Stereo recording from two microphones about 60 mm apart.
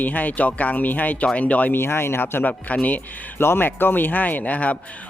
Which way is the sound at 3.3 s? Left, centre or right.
Left.